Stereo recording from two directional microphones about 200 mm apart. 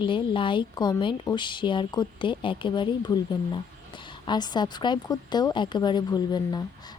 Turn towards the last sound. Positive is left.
turn(degrees=20)  # may be behind; listen again after turning